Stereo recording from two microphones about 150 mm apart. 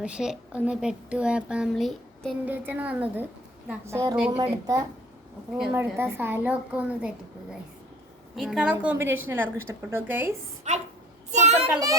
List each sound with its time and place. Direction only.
0.0 s a woman's voice: 5° right (ahead or behind)
2.4 s a woman's voice: 10° right (ahead or behind)
8.4 s a woman's voice: 5° right (ahead or behind)
10.7 s speech: 50° right (ahead or behind)
11.3 s child singing: 50° right (ahead or behind)